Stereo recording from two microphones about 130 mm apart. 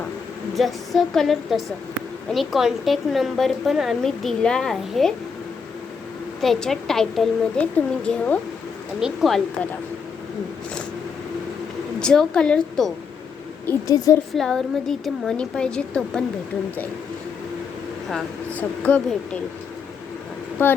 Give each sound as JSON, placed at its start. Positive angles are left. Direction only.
{"t": 0.5, "sound": "a woman's voice", "side_deg": 0}
{"t": 6.4, "sound": "a woman's voice", "side_deg": 0}
{"t": 9.0, "sound": "a woman's voice", "side_deg": 0}
{"t": 11.9, "sound": "a woman's voice", "side_deg": 5}
{"t": 13.8, "sound": "a woman's voice", "side_deg": 25}
{"t": 14.3, "sound": "a woman's voice", "side_deg": 5}
{"t": 18.5, "sound": "speech", "side_deg": 10}